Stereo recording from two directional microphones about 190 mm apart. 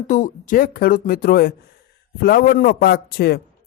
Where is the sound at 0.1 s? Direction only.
45° left (ahead or behind).